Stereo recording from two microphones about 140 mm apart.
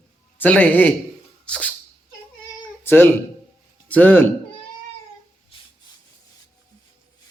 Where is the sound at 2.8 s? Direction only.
15° left (ahead or behind).